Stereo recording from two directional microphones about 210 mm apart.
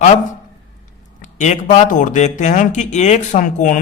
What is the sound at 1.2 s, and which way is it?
Speech, 35° left (ahead or behind).